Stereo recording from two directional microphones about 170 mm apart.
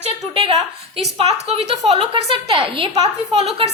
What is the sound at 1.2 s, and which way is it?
A woman's voice, 40° right (ahead or behind).